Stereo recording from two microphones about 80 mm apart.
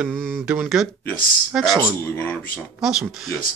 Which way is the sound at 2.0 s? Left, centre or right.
Left.